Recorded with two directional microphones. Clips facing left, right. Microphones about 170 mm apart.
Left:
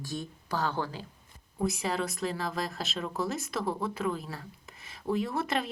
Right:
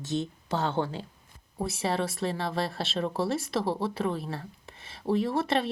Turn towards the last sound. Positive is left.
turn(degrees=-30)  # may be behind; listen again after turning